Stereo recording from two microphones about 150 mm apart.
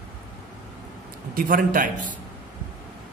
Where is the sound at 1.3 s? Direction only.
70° right (ahead or behind).